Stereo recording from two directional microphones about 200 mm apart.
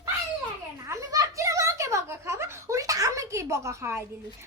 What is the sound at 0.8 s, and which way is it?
Giggle, 15° right (ahead or behind).